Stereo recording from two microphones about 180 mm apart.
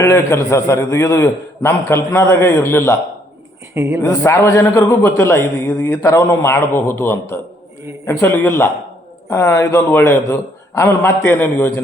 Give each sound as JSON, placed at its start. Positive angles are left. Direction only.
{"t": 0.0, "sound": "a man's voice", "side_deg": 15}
{"t": 3.8, "sound": "a woman's voice", "side_deg": -15}
{"t": 4.0, "sound": "a man's voice", "side_deg": 15}